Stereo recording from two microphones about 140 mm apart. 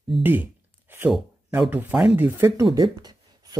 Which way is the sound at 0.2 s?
15° right (ahead or behind).